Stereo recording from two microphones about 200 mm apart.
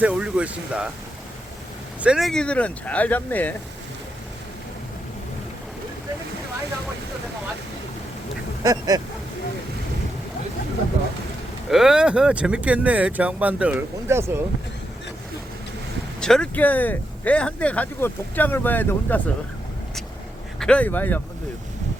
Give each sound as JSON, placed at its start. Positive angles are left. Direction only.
{"t": 0.0, "sound": "speech", "side_deg": -5}
{"t": 2.0, "sound": "speech", "side_deg": -5}
{"t": 8.6, "sound": "vehicle", "side_deg": -20}
{"t": 11.7, "sound": "speech", "side_deg": -5}
{"t": 16.2, "sound": "speech", "side_deg": 5}
{"t": 20.6, "sound": "speech", "side_deg": 5}